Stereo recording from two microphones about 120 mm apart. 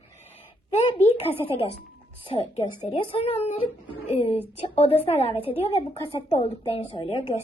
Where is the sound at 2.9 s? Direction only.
55° left (ahead or behind).